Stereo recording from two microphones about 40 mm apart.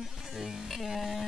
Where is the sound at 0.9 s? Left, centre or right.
Centre.